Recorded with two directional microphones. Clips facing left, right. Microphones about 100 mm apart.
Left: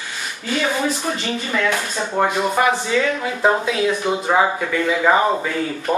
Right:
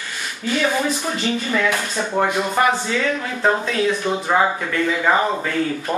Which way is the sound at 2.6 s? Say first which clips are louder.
Even; centre (ahead or behind).